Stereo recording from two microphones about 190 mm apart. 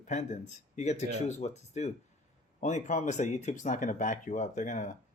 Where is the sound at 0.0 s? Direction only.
40° left (ahead or behind).